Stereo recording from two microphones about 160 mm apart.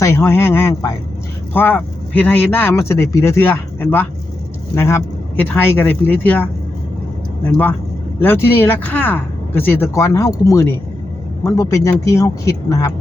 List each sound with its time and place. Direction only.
0.0 s speech: 15° left (ahead or behind)
8.2 s speech: 15° left (ahead or behind)